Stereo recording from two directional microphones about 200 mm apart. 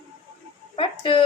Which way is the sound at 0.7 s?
25° left (ahead or behind).